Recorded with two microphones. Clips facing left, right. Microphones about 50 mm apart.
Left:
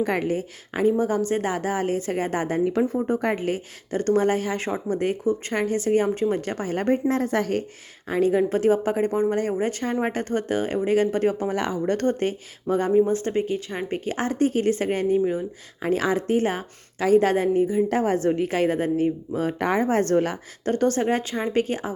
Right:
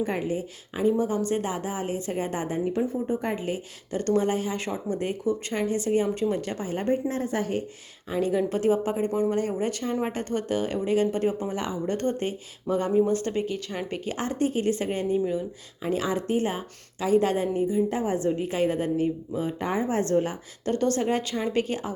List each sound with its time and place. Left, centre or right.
0.0 s speech: left
0.3 s speech: left
2.7 s speech: left
3.9 s a woman's voice: left
8.1 s a woman's voice: left
17.8 s speech: left
19.3 s speech: left
20.7 s a woman's voice: left
21.2 s a woman's voice: left